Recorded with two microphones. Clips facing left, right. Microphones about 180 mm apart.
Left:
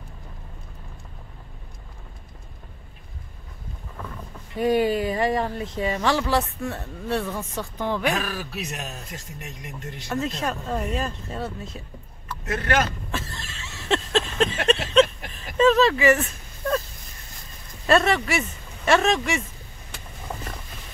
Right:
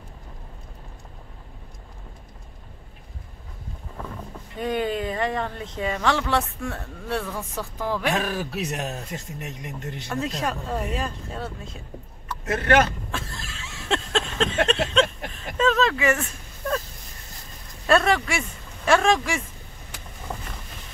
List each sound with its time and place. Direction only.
4.6 s speech: 5° left (ahead or behind)
8.2 s speech: 25° right (ahead or behind)
10.0 s speech: centre (ahead or behind)
13.1 s a sound: centre (ahead or behind)
15.5 s speech: 5° left (ahead or behind)
17.8 s speech: centre (ahead or behind)